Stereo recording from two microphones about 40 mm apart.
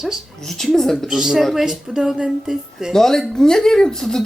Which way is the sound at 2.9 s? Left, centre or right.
Centre.